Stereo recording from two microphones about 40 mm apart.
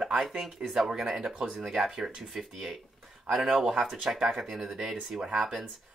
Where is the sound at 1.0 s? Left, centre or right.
Right; by 3.1 s centre.